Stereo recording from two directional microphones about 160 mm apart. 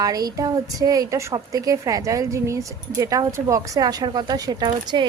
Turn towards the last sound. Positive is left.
turn(degrees=-25)  # may be behind; listen again after turning